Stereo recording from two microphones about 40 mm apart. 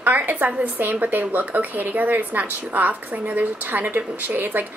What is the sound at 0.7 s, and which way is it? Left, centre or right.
A woman's voice, right.